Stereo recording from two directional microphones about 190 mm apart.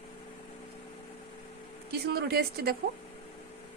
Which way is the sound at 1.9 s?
55° right (ahead or behind).